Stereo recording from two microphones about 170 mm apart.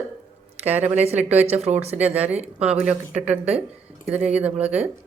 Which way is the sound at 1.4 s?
40° right (ahead or behind).